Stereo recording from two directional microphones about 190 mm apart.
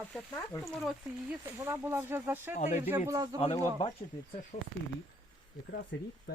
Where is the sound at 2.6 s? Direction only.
40° left (ahead or behind).